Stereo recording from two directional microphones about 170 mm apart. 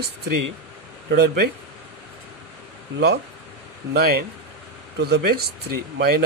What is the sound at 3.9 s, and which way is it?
Speech, 65° right (ahead or behind).